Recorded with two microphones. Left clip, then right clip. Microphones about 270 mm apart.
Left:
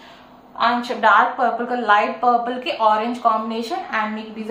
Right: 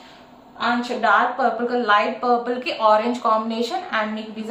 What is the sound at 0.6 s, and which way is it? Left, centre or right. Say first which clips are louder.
A woman's voice: left 4 dB; centre.